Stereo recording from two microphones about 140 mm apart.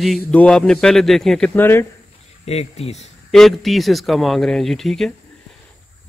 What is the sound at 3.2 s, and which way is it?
Speech, centre (ahead or behind).